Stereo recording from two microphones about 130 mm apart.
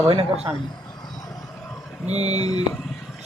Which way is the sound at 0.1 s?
45° right (ahead or behind).